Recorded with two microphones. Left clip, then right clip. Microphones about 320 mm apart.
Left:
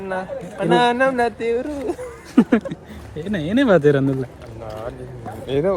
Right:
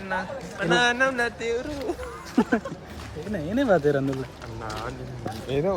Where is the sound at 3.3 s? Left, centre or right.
Left.